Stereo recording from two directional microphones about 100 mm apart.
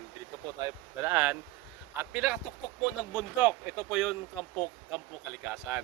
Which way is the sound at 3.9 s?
5° right (ahead or behind).